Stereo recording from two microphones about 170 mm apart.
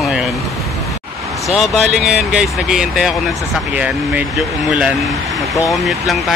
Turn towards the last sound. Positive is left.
turn(degrees=0)  # may be behind; listen again after turning